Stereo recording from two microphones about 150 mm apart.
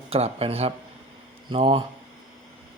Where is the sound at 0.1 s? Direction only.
40° right (ahead or behind).